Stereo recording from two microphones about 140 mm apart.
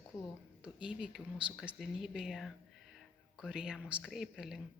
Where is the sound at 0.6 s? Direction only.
5° right (ahead or behind).